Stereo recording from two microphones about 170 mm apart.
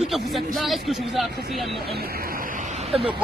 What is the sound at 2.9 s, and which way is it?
Speech, 35° right (ahead or behind).